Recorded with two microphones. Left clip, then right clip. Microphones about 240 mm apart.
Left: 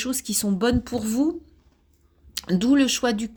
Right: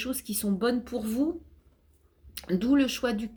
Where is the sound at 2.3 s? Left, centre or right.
Left.